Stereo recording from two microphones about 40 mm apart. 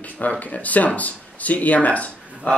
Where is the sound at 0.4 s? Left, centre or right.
Left.